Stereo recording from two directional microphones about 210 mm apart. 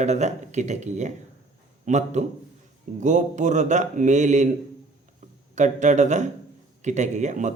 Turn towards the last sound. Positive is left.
turn(degrees=-35)  # may be behind; listen again after turning